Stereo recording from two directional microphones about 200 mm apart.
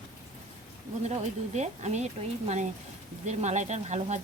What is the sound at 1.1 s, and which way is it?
Speech, 35° right (ahead or behind).